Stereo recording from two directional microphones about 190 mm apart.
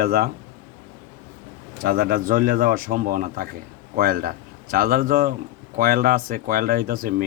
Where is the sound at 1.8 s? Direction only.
50° right (ahead or behind).